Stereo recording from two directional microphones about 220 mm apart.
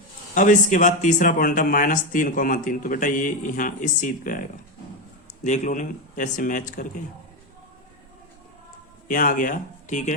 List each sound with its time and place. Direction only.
0.3 s speech: 35° left (ahead or behind)
9.0 s speech: 40° left (ahead or behind)